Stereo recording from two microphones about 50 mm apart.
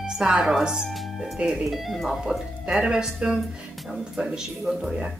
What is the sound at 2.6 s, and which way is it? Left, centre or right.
Speech, centre.